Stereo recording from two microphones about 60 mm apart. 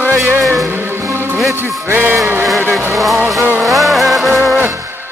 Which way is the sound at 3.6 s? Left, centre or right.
Centre.